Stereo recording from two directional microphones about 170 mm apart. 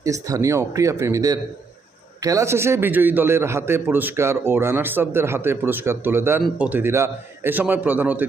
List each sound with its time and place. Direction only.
0.0 s a man's voice: 20° right (ahead or behind)